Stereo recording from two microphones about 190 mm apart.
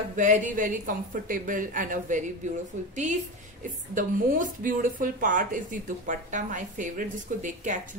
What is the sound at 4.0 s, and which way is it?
Speech, 45° right (ahead or behind).